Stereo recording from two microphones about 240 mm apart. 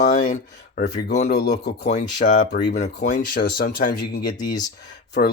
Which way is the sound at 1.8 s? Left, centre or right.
Left.